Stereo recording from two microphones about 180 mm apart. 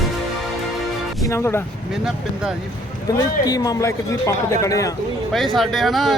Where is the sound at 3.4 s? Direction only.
20° left (ahead or behind).